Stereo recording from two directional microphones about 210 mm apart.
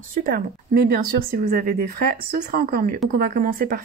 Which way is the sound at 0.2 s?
45° right (ahead or behind).